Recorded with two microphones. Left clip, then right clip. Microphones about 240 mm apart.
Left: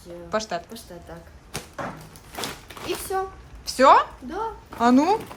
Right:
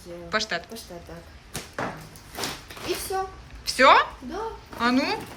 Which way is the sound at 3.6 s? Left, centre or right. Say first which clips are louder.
Left 1 dB; centre.